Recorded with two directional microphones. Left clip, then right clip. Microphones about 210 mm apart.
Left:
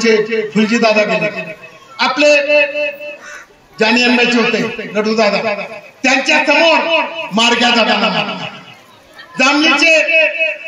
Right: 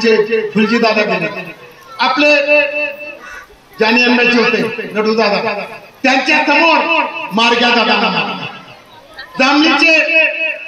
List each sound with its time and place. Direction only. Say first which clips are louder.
0.0 s a man's voice: right 1 dB; 50° left (ahead or behind)